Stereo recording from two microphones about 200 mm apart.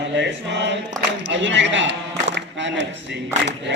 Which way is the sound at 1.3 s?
65° right (ahead or behind).